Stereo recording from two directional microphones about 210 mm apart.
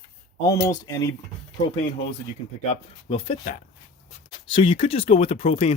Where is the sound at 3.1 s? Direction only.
25° left (ahead or behind).